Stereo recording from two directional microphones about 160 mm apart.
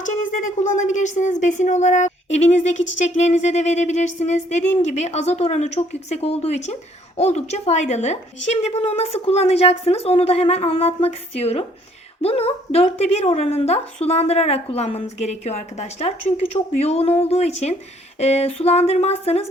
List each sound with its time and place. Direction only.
0.0 s speech: 50° left (ahead or behind)